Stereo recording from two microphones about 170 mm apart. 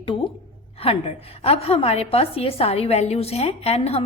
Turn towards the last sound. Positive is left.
turn(degrees=35)  # may be behind; listen again after turning